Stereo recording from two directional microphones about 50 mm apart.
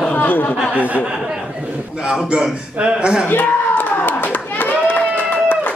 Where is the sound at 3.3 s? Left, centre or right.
Left.